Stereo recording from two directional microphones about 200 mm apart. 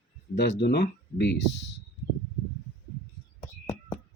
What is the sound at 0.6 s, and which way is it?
Speech, 55° left (ahead or behind).